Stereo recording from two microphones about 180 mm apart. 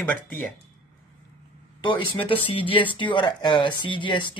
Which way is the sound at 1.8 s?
25° left (ahead or behind).